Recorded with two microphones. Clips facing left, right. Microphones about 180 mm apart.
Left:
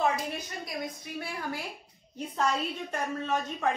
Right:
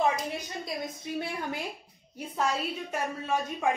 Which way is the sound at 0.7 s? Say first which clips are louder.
Right 2 dB; 25° right (ahead or behind).